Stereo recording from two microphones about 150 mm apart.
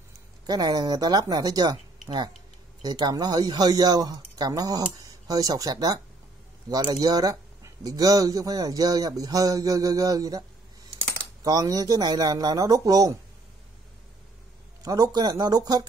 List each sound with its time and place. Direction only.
0.5 s speech: 25° right (ahead or behind)
11.4 s speech: 25° right (ahead or behind)
14.8 s speech: 25° right (ahead or behind)